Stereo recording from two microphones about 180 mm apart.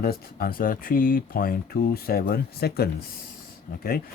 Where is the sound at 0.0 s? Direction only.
55° left (ahead or behind).